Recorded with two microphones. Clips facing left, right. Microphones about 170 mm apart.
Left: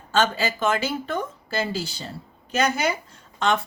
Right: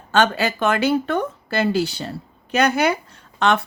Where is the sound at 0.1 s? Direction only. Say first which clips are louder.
Right 4 dB; 65° right (ahead or behind).